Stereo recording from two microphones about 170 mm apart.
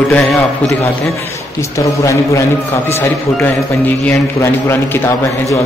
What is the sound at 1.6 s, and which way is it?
A man's voice, 15° left (ahead or behind).